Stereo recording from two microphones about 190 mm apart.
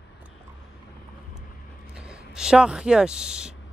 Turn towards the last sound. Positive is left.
turn(degrees=-5)  # may be behind; listen again after turning